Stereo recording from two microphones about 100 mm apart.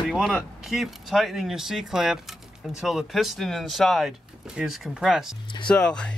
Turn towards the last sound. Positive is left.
turn(degrees=10)  # may be behind; listen again after turning